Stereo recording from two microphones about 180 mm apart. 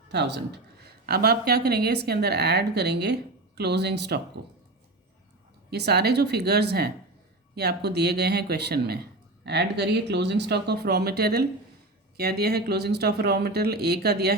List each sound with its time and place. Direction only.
0.1 s a woman's voice: 70° right (ahead or behind)
5.7 s a woman's voice: 65° right (ahead or behind)